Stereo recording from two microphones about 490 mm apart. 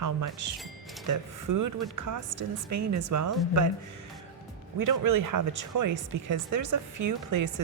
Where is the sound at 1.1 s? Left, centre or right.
Right.